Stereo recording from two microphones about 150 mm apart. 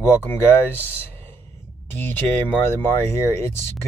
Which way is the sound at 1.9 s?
15° left (ahead or behind).